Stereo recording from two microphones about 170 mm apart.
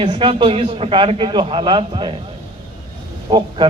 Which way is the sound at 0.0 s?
30° right (ahead or behind).